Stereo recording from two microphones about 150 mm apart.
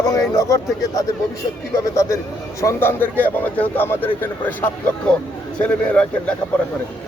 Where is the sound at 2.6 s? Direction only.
15° left (ahead or behind).